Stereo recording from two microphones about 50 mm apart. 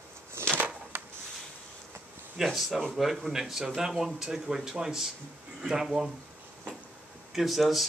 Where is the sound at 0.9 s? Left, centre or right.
Right.